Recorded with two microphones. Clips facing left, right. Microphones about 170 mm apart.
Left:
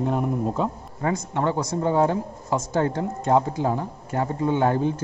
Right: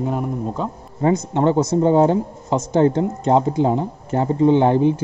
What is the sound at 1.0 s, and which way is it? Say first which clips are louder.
Speech: right 7 dB; 25° right (ahead or behind).